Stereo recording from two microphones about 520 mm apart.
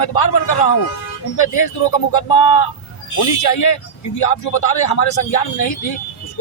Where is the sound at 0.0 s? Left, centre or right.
Left.